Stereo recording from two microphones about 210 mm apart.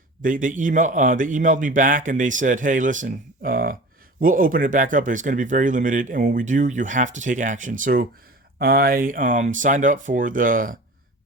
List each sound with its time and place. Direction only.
0.2 s speech: 40° right (ahead or behind)